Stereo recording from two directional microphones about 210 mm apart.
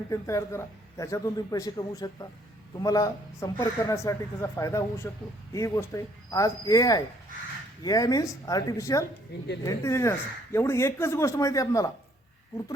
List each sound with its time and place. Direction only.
0.1 s speech: 15° left (ahead or behind)
9.3 s speech: 55° left (ahead or behind)
9.6 s speech: 15° left (ahead or behind)